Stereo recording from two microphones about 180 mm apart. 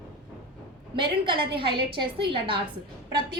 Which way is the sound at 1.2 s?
25° right (ahead or behind).